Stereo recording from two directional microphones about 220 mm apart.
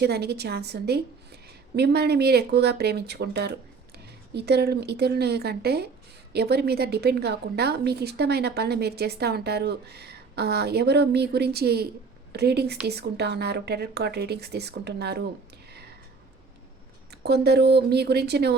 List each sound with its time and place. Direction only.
0.0 s a woman's voice: 50° right (ahead or behind)
17.1 s a woman's voice: 50° right (ahead or behind)